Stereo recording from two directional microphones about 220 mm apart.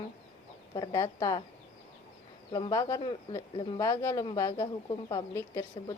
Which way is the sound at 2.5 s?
15° left (ahead or behind).